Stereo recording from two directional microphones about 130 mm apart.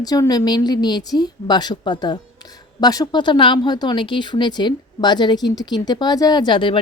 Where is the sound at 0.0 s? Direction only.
30° left (ahead or behind).